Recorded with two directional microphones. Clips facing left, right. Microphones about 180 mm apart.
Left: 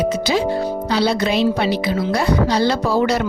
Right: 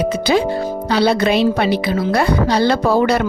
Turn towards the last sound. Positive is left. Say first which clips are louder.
# right 3 dB
turn(degrees=-55)  # may be behind; listen again after turning